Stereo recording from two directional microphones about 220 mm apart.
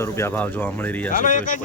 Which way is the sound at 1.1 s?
35° left (ahead or behind).